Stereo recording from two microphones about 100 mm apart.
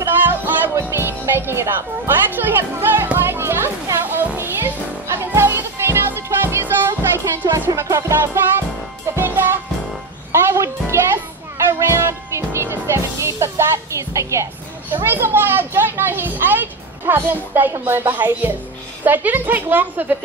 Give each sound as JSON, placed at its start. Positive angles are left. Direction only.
{"t": 0.0, "sound": "music", "side_deg": -20}
{"t": 15.0, "sound": "a child's voice", "side_deg": -20}